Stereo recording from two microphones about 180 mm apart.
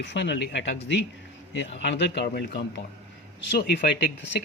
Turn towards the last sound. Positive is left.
turn(degrees=75)  # may be behind; listen again after turning